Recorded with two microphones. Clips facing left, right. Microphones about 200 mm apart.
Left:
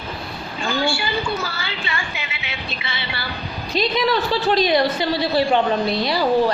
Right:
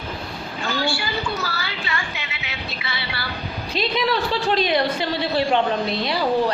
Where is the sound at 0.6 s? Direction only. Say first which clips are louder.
Left 3 dB; 25° left (ahead or behind).